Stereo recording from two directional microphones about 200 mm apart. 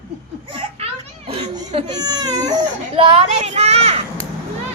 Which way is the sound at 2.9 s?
30° right (ahead or behind).